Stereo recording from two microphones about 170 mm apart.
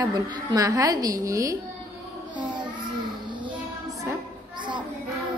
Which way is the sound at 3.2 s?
25° right (ahead or behind).